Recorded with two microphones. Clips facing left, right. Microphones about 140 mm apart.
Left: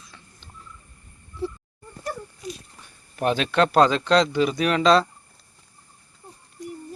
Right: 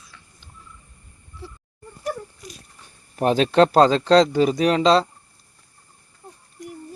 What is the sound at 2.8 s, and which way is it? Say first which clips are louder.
Speech: right 3 dB; 35° right (ahead or behind).